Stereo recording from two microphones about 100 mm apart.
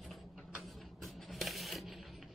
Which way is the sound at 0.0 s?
Centre (ahead or behind).